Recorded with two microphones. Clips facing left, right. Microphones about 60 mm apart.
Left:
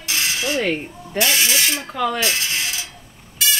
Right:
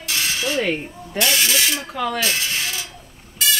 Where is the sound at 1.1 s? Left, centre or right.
Centre.